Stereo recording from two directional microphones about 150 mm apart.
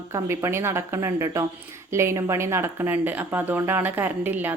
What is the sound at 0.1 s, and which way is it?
A woman's voice, 20° right (ahead or behind).